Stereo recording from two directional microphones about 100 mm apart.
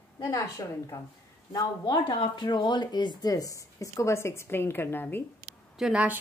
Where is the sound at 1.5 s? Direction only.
50° left (ahead or behind); by 5.2 s 20° left (ahead or behind).